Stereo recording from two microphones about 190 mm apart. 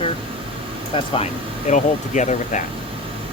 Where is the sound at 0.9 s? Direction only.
30° left (ahead or behind).